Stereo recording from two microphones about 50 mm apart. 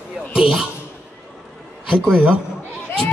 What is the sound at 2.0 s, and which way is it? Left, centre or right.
Speech, centre.